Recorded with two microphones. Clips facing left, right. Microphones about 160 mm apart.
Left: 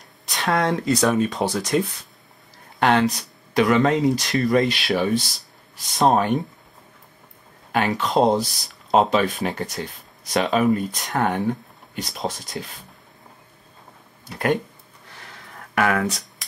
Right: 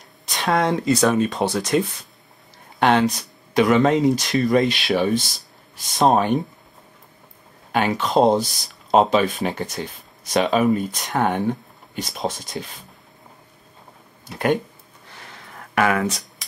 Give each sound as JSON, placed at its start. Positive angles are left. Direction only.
{"t": 0.3, "sound": "speech", "side_deg": 0}
{"t": 1.4, "sound": "speech", "side_deg": -25}
{"t": 2.8, "sound": "speech", "side_deg": 0}
{"t": 7.7, "sound": "speech", "side_deg": 0}
{"t": 14.3, "sound": "speech", "side_deg": 0}
{"t": 15.9, "sound": "speech", "side_deg": 0}